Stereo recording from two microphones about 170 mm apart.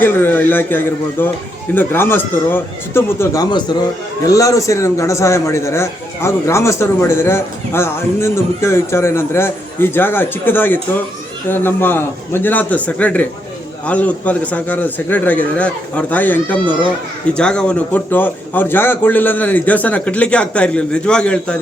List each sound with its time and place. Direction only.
0.0 s a man's voice: 10° left (ahead or behind)